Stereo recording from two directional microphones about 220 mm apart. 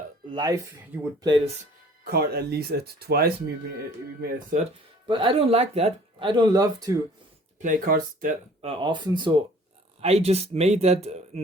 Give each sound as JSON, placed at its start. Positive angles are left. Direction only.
{"t": 0.3, "sound": "speech", "side_deg": -20}
{"t": 2.0, "sound": "speech", "side_deg": -45}
{"t": 5.0, "sound": "speech", "side_deg": -25}
{"t": 7.6, "sound": "speech", "side_deg": -40}
{"t": 8.6, "sound": "speech", "side_deg": -20}